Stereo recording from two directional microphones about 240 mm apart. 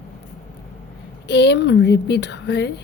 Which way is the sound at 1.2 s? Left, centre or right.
Left.